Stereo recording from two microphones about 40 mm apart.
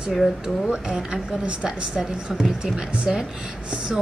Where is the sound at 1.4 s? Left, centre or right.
Right.